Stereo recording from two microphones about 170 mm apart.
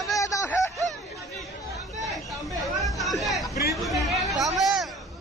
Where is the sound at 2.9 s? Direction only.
Centre (ahead or behind).